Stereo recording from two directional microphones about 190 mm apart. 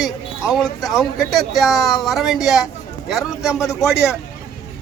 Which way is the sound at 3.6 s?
15° left (ahead or behind).